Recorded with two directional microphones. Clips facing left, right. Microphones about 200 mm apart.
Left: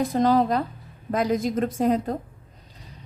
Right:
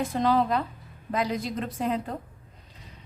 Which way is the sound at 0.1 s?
40° left (ahead or behind).